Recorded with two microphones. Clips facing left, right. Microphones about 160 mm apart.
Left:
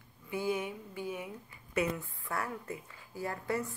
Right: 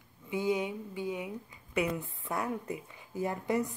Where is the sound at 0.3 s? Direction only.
20° right (ahead or behind).